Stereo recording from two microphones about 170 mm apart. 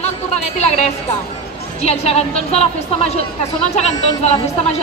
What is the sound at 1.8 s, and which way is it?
A woman's voice, 40° left (ahead or behind).